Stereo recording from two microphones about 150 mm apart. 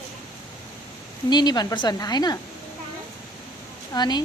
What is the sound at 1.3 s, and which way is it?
A woman's voice, 30° left (ahead or behind).